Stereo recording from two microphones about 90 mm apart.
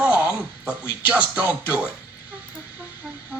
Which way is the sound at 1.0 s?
15° right (ahead or behind).